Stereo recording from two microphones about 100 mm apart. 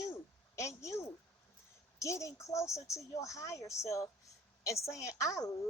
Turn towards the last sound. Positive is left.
turn(degrees=35)  # may be behind; listen again after turning